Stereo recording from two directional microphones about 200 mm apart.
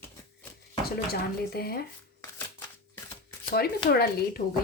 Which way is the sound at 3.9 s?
50° left (ahead or behind).